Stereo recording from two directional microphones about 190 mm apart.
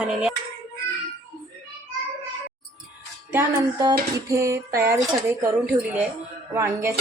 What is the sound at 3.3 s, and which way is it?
Speech, 15° right (ahead or behind).